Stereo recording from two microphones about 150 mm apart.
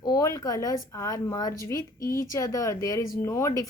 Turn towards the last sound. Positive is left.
turn(degrees=20)  # may be behind; listen again after turning